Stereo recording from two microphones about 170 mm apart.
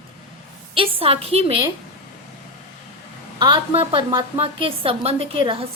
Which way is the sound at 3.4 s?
30° right (ahead or behind).